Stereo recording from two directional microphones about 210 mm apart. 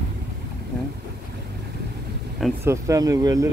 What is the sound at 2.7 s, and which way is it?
Speech, 15° right (ahead or behind).